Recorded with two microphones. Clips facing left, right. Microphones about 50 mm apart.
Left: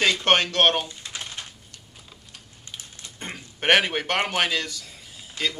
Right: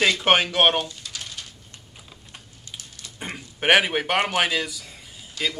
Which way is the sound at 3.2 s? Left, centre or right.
Centre.